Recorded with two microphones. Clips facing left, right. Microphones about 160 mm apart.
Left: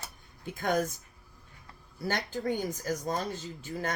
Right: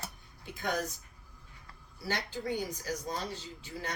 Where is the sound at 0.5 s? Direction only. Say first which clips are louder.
Left 5 dB; 50° left (ahead or behind).